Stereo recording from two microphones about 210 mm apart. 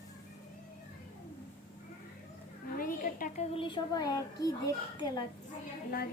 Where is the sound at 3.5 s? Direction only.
25° left (ahead or behind).